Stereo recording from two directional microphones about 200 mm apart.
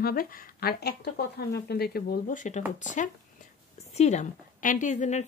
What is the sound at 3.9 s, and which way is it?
Speech, 35° left (ahead or behind).